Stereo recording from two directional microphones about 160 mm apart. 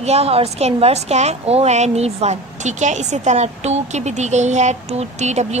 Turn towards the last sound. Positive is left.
turn(degrees=-45)  # may be behind; listen again after turning